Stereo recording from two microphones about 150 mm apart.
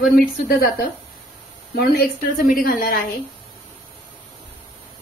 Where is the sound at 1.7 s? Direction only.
85° left; by 3.0 s 70° left (ahead or behind).